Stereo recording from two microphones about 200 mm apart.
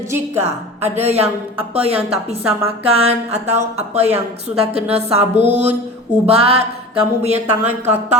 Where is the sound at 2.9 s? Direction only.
30° right (ahead or behind).